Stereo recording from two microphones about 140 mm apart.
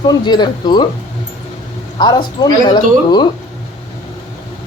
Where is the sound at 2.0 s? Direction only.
30° left (ahead or behind).